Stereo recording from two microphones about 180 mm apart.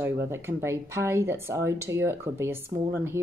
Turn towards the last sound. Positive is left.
turn(degrees=-15)  # may be behind; listen again after turning